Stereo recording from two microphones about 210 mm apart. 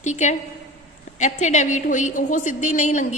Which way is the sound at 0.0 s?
35° left (ahead or behind).